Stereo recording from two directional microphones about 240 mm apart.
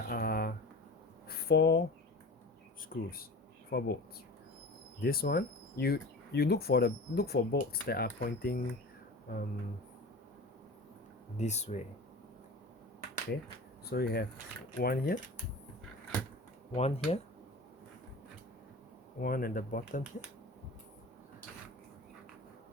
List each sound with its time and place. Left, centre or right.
0.1 s a sound: left
2.9 s speech: left
4.9 s speech: left
11.3 s speech: left
13.8 s speech: left
16.7 s speech: left
19.2 s speech: left